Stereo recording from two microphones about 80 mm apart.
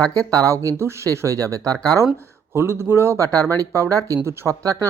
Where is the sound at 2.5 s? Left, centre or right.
Right.